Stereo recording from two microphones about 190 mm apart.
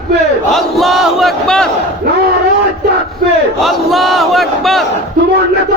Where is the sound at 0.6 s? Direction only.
Centre (ahead or behind).